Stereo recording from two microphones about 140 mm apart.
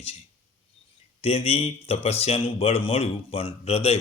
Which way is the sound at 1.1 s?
40° left (ahead or behind).